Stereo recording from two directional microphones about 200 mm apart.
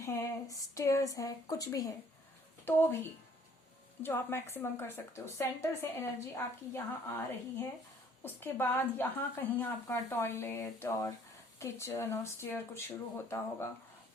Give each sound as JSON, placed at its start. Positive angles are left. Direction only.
{"t": 0.0, "sound": "a woman's voice", "side_deg": 15}
{"t": 4.0, "sound": "a woman's voice", "side_deg": 10}
{"t": 8.2, "sound": "a woman's voice", "side_deg": 10}